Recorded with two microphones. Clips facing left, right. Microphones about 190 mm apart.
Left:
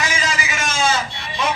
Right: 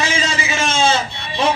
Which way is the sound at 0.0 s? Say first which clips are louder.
Right 3 dB; 30° right (ahead or behind).